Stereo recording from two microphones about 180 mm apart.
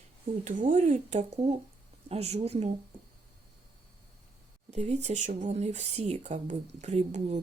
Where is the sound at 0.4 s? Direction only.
45° right (ahead or behind).